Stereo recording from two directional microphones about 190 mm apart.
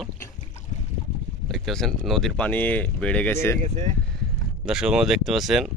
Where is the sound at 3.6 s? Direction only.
35° right (ahead or behind).